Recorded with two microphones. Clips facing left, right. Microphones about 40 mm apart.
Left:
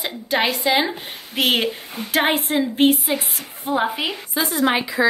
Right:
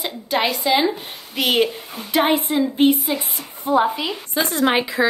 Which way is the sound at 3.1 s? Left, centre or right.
Centre.